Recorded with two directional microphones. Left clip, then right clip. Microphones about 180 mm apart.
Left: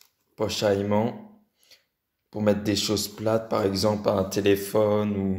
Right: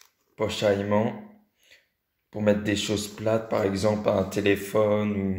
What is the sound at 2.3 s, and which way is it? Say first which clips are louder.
Speech: even; 20° left (ahead or behind).